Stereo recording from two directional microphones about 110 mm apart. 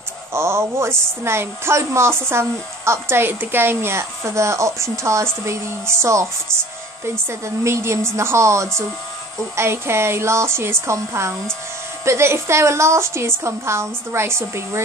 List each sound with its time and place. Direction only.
0.3 s a woman's voice: 25° right (ahead or behind)